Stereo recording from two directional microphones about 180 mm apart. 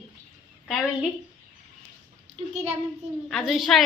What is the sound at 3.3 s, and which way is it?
Speech, centre (ahead or behind).